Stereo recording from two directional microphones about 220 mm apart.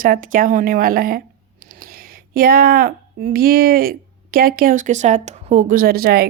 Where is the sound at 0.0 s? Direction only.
40° right (ahead or behind).